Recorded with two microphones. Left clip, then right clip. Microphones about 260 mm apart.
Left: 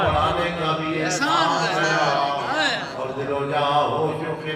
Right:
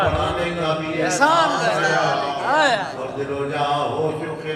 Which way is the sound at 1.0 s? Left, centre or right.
Centre.